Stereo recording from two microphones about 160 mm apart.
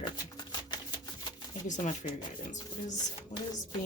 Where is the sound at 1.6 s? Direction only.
50° left (ahead or behind).